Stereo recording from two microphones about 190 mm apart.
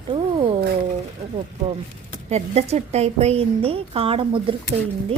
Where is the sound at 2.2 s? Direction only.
35° right (ahead or behind).